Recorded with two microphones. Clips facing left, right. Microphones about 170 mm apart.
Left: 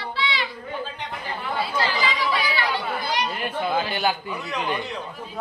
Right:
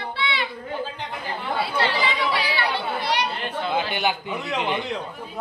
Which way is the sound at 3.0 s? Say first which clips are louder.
Right 2 dB; 70° right (ahead or behind).